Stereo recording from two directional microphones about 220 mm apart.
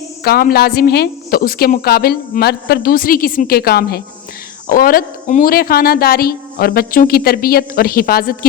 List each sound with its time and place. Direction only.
0.3 s a woman's voice: 45° left (ahead or behind)